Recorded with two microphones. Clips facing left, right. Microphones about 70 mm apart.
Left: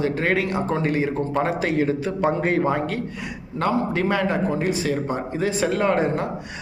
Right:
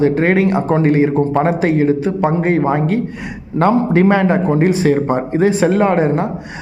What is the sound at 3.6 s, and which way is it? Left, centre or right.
A man's voice, right.